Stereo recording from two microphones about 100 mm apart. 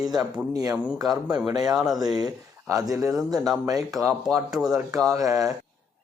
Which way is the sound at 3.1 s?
Centre (ahead or behind).